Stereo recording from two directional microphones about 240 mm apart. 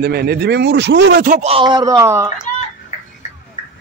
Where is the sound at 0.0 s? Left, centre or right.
Right; by 2.4 s centre.